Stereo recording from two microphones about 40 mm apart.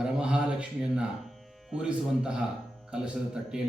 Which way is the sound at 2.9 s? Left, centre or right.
Right.